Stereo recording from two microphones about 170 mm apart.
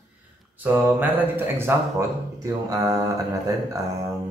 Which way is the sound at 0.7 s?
10° right (ahead or behind).